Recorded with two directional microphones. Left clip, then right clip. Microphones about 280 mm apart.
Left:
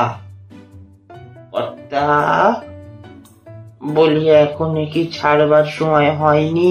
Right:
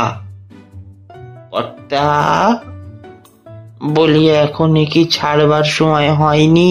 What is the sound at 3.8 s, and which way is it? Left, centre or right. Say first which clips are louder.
Speech: right 2 dB; right.